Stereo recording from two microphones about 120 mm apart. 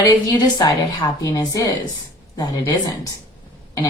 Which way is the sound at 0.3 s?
35° left (ahead or behind).